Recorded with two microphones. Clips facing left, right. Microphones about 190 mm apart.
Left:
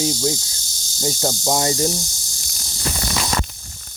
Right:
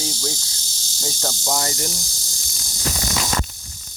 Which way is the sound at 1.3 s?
25° left (ahead or behind).